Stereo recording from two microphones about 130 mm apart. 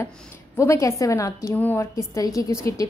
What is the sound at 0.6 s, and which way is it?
A woman's voice, 25° left (ahead or behind).